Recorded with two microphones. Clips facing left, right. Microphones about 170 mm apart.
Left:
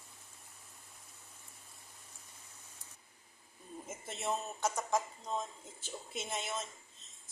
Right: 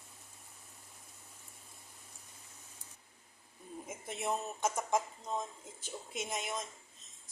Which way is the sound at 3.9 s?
15° right (ahead or behind).